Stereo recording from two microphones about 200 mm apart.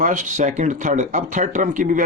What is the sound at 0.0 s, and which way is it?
Speech, 40° right (ahead or behind).